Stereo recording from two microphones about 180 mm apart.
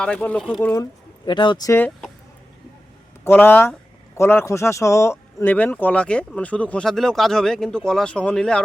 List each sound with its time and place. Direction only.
0.0 s speech: 5° left (ahead or behind)
1.2 s speech: 25° left (ahead or behind)
3.2 s speech: 10° left (ahead or behind)